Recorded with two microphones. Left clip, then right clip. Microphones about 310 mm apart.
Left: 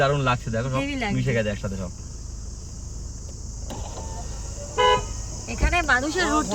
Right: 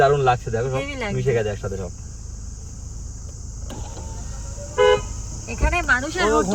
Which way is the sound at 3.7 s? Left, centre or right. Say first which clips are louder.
Left 1 dB; left.